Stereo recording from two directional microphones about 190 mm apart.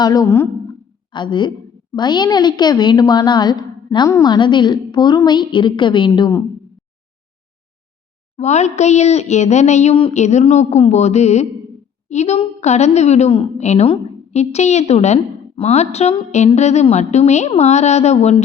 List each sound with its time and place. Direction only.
0.0 s a woman's voice: 20° left (ahead or behind)
8.4 s a woman's voice: 35° left (ahead or behind)